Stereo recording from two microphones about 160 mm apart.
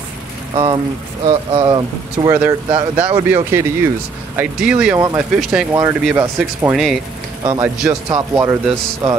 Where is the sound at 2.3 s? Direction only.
15° right (ahead or behind).